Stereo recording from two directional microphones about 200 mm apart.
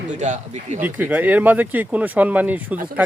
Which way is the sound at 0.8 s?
10° right (ahead or behind).